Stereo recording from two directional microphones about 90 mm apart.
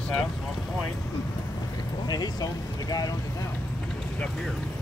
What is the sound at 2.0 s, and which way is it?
Speech, 50° left (ahead or behind).